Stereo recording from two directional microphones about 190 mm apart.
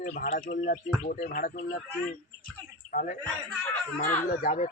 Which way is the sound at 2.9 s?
45° left (ahead or behind).